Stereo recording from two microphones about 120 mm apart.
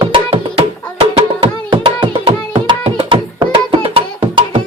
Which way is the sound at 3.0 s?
45° right (ahead or behind).